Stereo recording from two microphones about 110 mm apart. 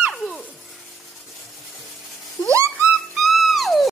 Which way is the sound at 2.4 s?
25° right (ahead or behind).